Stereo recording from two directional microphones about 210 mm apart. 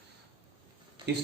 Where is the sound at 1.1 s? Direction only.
55° right (ahead or behind).